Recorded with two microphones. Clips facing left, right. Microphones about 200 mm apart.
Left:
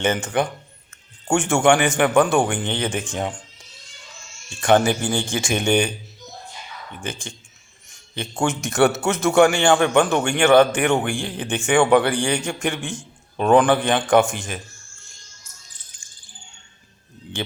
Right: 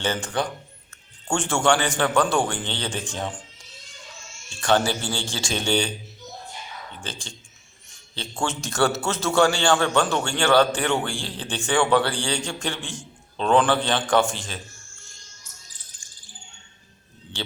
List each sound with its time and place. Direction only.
0.0 s a man's voice: 20° left (ahead or behind)
4.9 s a man's voice: 20° left (ahead or behind)
7.0 s a man's voice: 20° left (ahead or behind)